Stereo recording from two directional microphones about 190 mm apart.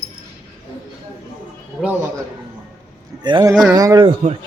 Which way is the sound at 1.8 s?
Centre (ahead or behind).